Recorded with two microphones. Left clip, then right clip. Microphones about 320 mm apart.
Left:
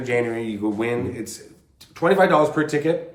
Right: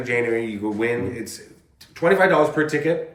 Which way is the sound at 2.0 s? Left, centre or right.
Centre.